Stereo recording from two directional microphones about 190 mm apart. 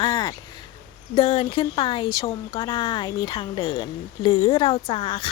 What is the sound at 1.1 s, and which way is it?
A woman's voice, 25° left (ahead or behind).